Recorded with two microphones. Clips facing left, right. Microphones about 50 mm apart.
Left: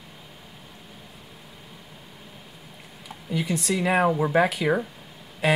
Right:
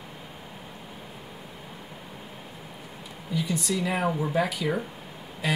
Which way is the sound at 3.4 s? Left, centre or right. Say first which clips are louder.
Left 2 dB; left.